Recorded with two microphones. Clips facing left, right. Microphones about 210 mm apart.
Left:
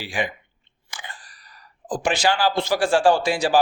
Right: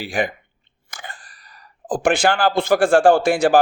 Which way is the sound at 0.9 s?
45° right (ahead or behind).